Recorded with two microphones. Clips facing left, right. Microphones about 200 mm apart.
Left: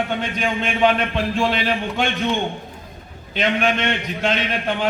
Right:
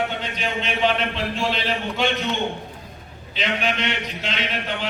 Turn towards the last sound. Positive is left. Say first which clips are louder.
# left 5 dB
turn(degrees=50)  # may be behind; listen again after turning